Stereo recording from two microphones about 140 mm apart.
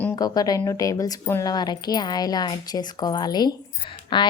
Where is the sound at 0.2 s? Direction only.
25° left (ahead or behind).